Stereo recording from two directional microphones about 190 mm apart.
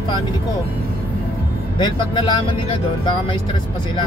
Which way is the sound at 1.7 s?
25° left (ahead or behind).